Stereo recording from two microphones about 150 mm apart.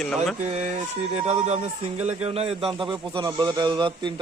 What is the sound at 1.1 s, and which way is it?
Speech, 45° right (ahead or behind).